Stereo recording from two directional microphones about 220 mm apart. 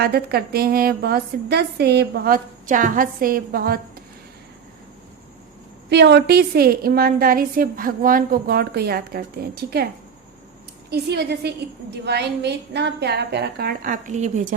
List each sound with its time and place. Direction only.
0.0 s a woman's voice: 45° right (ahead or behind)
5.9 s a woman's voice: 50° right (ahead or behind)
10.8 s a woman's voice: 45° right (ahead or behind)